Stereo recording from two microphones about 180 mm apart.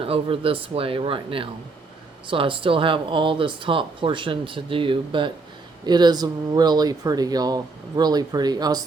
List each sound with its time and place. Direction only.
0.0 s speech: 30° right (ahead or behind)